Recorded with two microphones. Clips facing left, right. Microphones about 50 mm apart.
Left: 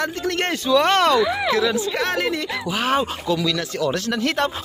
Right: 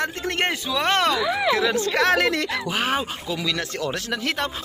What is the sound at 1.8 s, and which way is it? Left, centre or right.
Speech, right.